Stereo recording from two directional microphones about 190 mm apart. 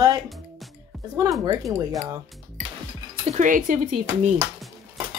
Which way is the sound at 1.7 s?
20° right (ahead or behind).